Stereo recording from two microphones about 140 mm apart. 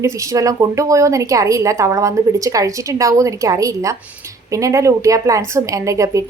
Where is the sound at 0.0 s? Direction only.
20° right (ahead or behind).